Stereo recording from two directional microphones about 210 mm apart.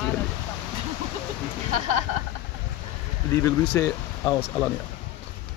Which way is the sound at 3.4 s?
10° left (ahead or behind).